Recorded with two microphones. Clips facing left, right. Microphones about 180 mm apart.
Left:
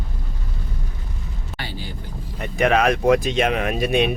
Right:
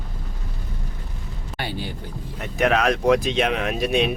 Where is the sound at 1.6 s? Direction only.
60° right (ahead or behind).